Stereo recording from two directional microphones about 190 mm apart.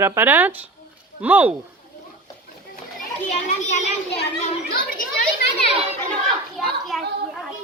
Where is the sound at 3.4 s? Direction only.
40° left (ahead or behind).